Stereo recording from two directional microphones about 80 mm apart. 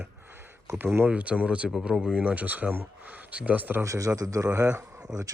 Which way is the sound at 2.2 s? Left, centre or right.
Centre.